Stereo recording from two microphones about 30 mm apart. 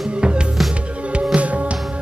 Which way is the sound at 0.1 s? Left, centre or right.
Right.